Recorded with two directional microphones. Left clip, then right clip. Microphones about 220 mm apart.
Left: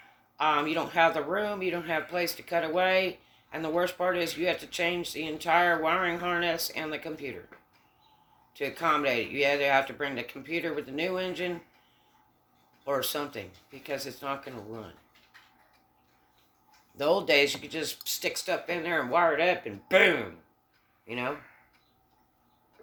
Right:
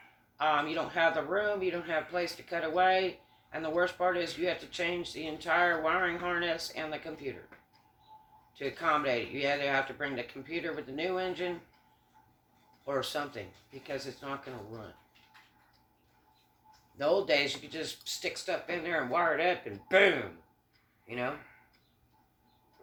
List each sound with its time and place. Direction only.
0.3 s speech: 50° left (ahead or behind)
8.5 s speech: 50° left (ahead or behind)
12.8 s speech: 50° left (ahead or behind)
17.0 s speech: 50° left (ahead or behind)